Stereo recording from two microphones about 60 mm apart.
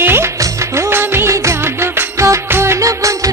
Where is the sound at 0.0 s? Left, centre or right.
Right.